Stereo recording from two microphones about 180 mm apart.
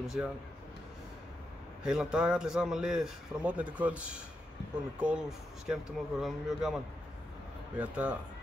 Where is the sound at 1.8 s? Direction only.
5° right (ahead or behind).